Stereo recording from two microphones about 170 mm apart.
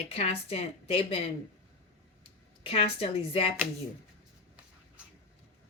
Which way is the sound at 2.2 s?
35° left (ahead or behind).